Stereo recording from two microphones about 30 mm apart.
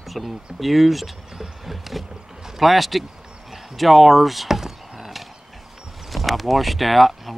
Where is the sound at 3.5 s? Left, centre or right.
Centre.